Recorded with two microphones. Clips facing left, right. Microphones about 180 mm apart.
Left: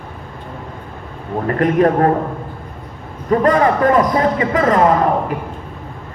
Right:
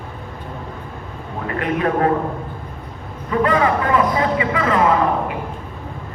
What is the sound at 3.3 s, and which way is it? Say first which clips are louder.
A man's voice: left 4 dB; 40° left (ahead or behind).